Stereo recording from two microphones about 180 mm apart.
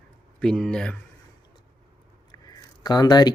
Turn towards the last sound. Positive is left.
turn(degrees=20)  # may be behind; listen again after turning